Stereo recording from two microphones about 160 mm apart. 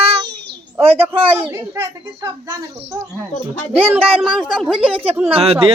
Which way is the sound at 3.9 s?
10° right (ahead or behind).